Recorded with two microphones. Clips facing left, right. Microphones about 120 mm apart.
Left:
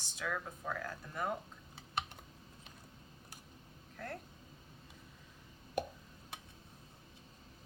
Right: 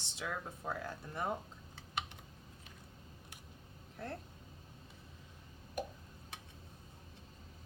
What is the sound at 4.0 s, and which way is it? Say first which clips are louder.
Speech: right 1 dB; 30° right (ahead or behind).